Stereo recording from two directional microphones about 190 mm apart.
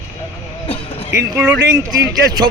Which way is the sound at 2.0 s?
20° right (ahead or behind).